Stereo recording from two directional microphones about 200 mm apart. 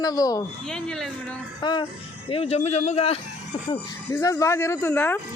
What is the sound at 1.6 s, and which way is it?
Speech, 20° left (ahead or behind).